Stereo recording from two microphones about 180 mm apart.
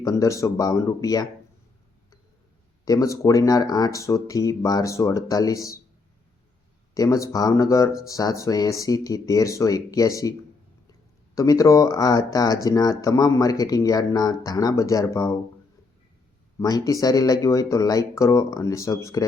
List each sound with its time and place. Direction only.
0.0 s speech: 20° left (ahead or behind)
2.8 s speech: 20° left (ahead or behind)
6.9 s speech: 20° left (ahead or behind)
11.3 s speech: 20° left (ahead or behind)
16.6 s speech: 20° left (ahead or behind)